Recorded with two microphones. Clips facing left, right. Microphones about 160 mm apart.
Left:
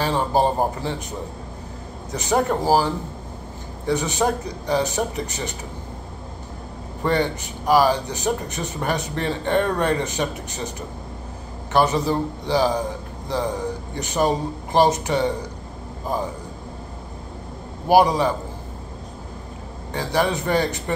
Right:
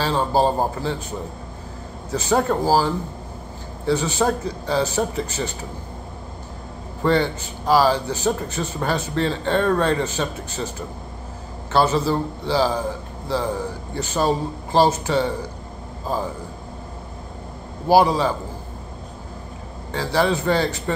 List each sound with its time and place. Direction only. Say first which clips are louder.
0.0 s a man's voice: right 1 dB; 20° left (ahead or behind)
2.1 s speech: right 1 dB; 20° left (ahead or behind)
7.1 s speech: right 2 dB; 15° left (ahead or behind)
11.7 s speech: even; 15° left (ahead or behind)
13.9 s speech: right 1 dB; 15° left (ahead or behind)
17.8 s speech: even; 15° left (ahead or behind)
19.9 s speech: right 1 dB; 15° left (ahead or behind)